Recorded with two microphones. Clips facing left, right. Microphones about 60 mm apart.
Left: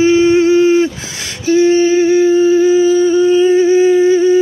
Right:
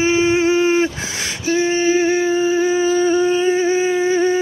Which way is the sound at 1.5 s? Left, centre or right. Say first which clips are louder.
Left 7 dB; right.